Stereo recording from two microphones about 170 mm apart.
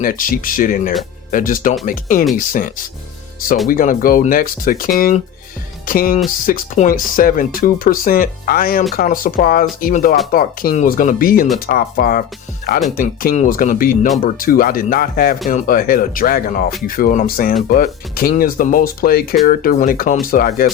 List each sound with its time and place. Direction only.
0.0 s speech: 55° left (ahead or behind)
5.8 s music: 55° left (ahead or behind)
6.2 s speech: 50° left (ahead or behind)
13.3 s speech: 50° left (ahead or behind)